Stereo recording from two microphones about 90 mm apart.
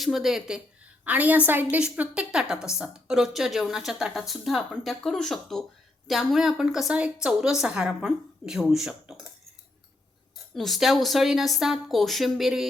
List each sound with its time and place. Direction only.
0.0 s a woman's voice: 5° right (ahead or behind)
1.0 s a woman's voice: 20° right (ahead or behind)
10.5 s a woman's voice: centre (ahead or behind)